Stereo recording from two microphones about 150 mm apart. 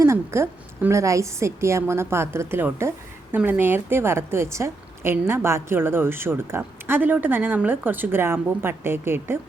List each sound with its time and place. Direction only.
0.0 s a woman's voice: 20° right (ahead or behind)